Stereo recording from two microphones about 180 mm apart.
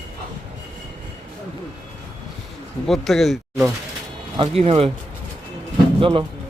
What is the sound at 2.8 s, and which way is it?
Speech, centre (ahead or behind).